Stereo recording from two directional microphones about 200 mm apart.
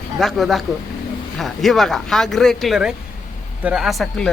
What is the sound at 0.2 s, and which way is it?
Speech, centre (ahead or behind).